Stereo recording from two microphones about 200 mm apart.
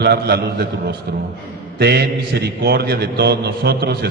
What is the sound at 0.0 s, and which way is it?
A man's voice, 50° right (ahead or behind).